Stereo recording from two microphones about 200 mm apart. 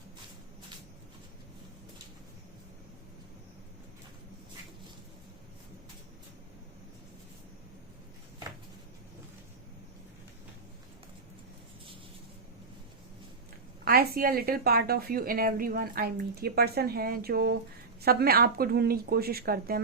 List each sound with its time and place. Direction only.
13.8 s a woman's voice: 50° right (ahead or behind)